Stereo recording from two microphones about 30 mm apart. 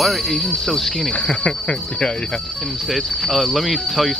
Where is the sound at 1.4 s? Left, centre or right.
Left.